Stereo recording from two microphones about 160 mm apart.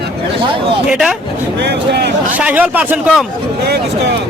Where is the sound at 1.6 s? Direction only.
90° right.